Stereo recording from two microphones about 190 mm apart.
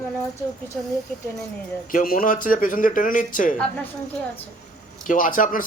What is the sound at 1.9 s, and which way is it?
A man's voice, 45° left (ahead or behind).